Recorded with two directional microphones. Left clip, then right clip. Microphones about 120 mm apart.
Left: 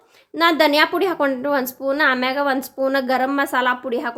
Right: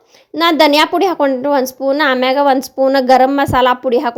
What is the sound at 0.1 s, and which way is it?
A woman's voice, 45° right (ahead or behind).